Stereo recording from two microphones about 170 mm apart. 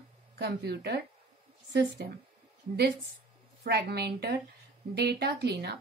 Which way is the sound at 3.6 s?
70° right (ahead or behind).